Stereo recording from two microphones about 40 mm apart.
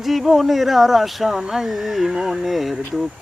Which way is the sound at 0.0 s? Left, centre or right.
Centre.